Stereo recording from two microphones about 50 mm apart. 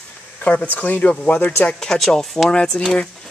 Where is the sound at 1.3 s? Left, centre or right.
Left.